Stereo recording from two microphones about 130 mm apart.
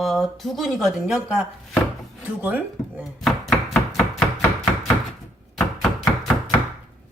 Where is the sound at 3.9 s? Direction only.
5° left (ahead or behind).